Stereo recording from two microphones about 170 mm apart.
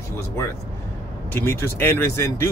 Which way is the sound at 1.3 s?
15° left (ahead or behind).